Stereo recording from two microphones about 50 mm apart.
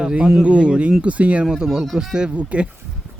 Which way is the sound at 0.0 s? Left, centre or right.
Right.